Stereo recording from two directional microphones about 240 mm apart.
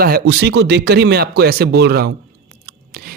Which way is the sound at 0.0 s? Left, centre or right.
Right.